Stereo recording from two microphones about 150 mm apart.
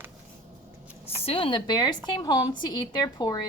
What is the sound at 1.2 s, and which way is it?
A woman's voice, 35° left (ahead or behind).